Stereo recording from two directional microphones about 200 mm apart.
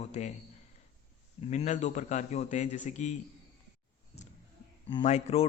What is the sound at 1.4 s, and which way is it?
Speech, 35° left (ahead or behind).